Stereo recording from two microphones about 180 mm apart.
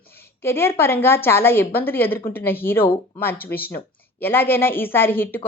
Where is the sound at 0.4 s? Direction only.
15° left (ahead or behind).